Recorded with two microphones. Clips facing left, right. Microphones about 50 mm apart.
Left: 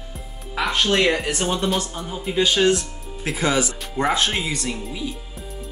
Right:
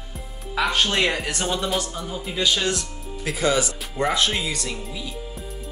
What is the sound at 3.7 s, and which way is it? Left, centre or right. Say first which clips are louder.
Speech: left 1 dB; centre.